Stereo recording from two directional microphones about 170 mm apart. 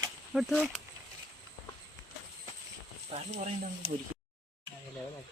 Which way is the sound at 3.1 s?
40° right (ahead or behind).